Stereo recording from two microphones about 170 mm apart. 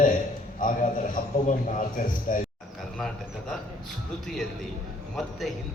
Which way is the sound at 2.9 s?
5° left (ahead or behind).